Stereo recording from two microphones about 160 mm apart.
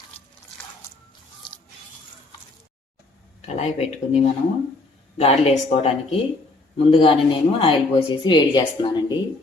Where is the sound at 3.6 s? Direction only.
45° left (ahead or behind).